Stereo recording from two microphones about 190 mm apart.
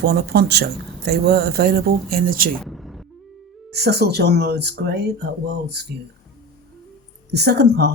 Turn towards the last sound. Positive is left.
turn(degrees=-60)  # may be behind; listen again after turning